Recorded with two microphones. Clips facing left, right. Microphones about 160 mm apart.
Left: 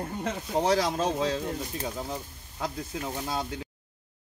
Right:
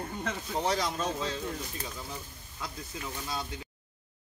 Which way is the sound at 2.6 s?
55° left (ahead or behind).